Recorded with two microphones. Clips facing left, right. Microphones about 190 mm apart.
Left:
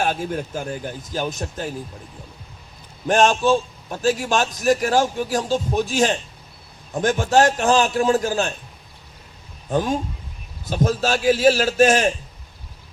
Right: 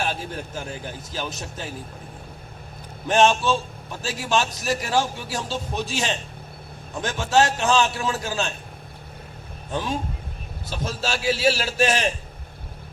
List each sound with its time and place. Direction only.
0.0 s speech: 50° left (ahead or behind)
3.1 s speech: 45° left (ahead or behind)
9.7 s speech: 45° left (ahead or behind)